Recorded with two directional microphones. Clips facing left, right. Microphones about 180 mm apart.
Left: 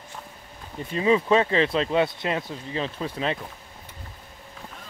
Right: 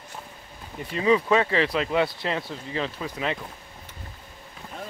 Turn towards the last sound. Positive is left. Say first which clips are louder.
# left 1 dB
turn(degrees=25)  # may be behind; listen again after turning